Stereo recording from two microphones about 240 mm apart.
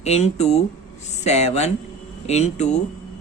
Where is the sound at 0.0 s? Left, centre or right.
Left.